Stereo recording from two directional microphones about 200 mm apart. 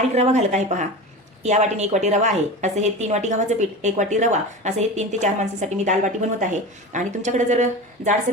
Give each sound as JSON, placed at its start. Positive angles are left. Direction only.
{"t": 0.1, "sound": "a woman's voice", "side_deg": -35}